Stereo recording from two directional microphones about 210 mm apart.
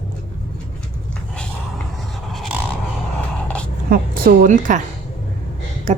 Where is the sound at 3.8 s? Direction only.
45° right (ahead or behind).